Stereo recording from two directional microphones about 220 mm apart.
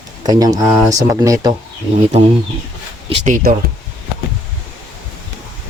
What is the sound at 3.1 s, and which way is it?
Speech, 35° right (ahead or behind).